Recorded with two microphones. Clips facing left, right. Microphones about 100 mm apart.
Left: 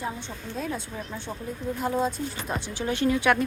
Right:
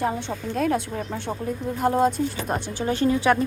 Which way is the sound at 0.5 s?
70° right (ahead or behind).